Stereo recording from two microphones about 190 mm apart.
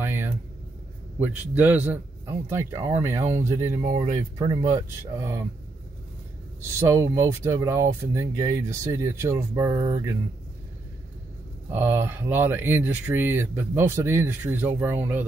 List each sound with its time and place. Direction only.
0.0 s vehicle: 10° right (ahead or behind)
1.2 s speech: 10° right (ahead or behind)
6.8 s speech: 15° right (ahead or behind)
11.7 s speech: 10° right (ahead or behind)